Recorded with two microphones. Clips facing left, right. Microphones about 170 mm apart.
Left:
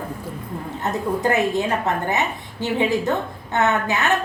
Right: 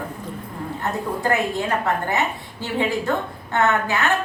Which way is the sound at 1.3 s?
20° left (ahead or behind).